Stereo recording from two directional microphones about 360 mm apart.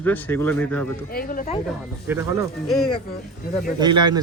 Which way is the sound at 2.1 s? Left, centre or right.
Centre.